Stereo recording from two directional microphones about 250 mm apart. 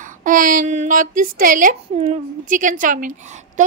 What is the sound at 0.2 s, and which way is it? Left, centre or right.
A woman's voice, right.